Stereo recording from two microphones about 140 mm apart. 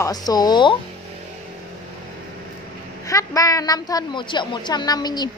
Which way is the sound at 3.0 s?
25° left (ahead or behind).